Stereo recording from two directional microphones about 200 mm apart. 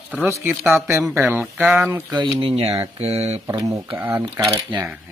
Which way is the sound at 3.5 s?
15° right (ahead or behind).